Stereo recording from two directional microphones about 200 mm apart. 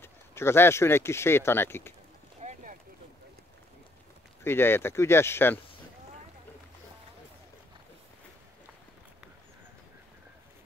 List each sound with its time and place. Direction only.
0.0 s speech: 10° left (ahead or behind)
2.4 s boat: 40° right (ahead or behind)
4.4 s speech: 10° left (ahead or behind)